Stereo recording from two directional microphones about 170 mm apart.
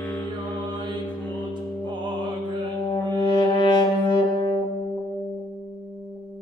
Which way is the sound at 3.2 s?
25° left (ahead or behind).